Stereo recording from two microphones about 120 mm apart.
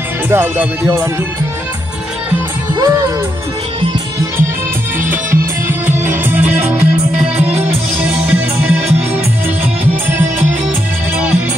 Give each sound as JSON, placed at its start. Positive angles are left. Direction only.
{"t": 0.3, "sound": "music", "side_deg": -20}
{"t": 2.7, "sound": "music", "side_deg": -30}
{"t": 5.1, "sound": "music", "side_deg": -15}
{"t": 7.4, "sound": "music", "side_deg": -60}
{"t": 8.0, "sound": "music", "side_deg": -10}